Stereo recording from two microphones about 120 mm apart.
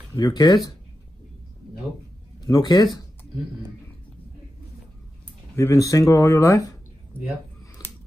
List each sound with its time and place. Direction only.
0.1 s speech: 35° left (ahead or behind)
2.4 s speech: 35° left (ahead or behind)
5.6 s speech: 25° left (ahead or behind)